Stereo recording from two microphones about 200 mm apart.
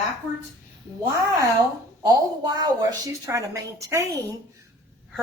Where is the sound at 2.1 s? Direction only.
20° right (ahead or behind).